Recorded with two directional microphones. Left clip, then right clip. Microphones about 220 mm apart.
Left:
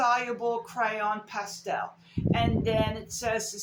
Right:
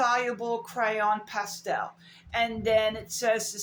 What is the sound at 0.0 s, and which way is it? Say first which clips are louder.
A man's voice: even; 25° right (ahead or behind).